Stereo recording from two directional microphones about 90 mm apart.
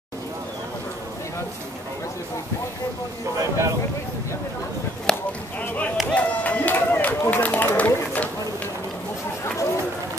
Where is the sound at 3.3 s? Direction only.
35° right (ahead or behind).